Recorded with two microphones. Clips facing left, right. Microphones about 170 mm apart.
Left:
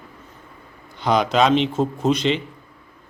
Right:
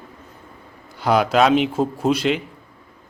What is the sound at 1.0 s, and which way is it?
A man's voice, 5° right (ahead or behind).